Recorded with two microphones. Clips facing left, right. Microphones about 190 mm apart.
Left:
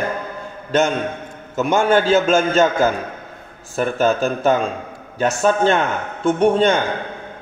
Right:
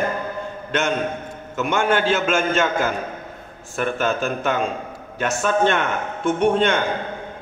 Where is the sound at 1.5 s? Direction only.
40° left (ahead or behind).